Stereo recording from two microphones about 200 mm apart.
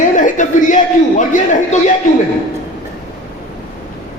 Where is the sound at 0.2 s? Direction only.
40° left (ahead or behind).